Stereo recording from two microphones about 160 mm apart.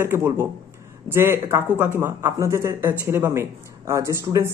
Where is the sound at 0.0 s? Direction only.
15° right (ahead or behind).